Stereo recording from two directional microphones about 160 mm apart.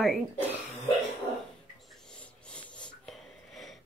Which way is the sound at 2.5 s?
5° left (ahead or behind).